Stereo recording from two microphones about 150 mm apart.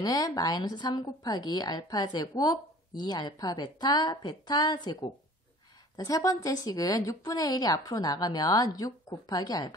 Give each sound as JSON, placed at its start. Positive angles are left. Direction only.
{"t": 0.0, "sound": "a woman's voice", "side_deg": 25}